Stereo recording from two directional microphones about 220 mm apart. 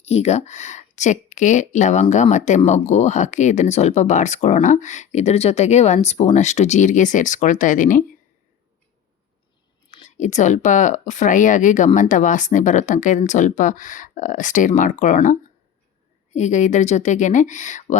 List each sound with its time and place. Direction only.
0.0 s speech: 30° left (ahead or behind)
9.9 s speech: 30° left (ahead or behind)